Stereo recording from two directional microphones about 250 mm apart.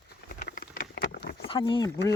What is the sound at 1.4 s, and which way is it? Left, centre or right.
Speech, centre.